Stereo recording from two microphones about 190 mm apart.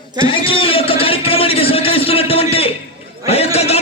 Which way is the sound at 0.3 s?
30° left (ahead or behind).